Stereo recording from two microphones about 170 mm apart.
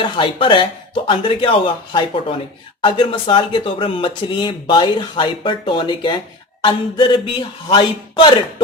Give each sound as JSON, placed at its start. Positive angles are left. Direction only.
{"t": 0.0, "sound": "speech", "side_deg": 30}